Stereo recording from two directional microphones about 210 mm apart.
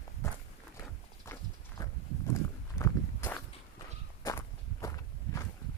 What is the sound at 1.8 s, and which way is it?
Horse, 15° left (ahead or behind).